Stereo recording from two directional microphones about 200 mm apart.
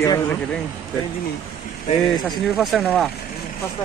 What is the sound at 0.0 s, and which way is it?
Speech, 15° left (ahead or behind).